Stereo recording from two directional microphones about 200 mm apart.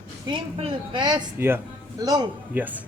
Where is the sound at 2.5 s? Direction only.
10° right (ahead or behind).